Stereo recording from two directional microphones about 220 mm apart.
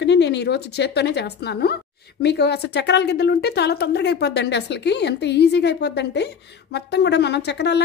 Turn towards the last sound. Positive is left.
turn(degrees=50)  # may be behind; listen again after turning